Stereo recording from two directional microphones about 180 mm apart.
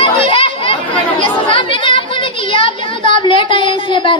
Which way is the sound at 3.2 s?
25° left (ahead or behind).